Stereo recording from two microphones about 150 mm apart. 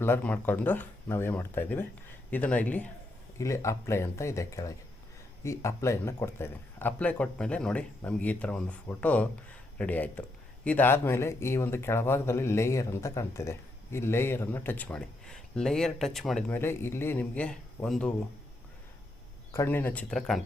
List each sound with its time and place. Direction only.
0.0 s speech: 10° left (ahead or behind)
16.5 s speech: 15° left (ahead or behind)
19.5 s speech: 15° left (ahead or behind)